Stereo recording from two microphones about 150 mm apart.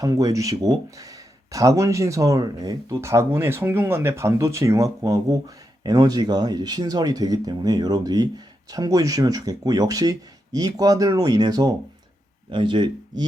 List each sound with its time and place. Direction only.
0.0 s speech: 25° right (ahead or behind)